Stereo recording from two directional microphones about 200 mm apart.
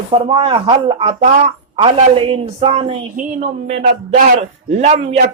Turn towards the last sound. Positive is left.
turn(degrees=-35)  # may be behind; listen again after turning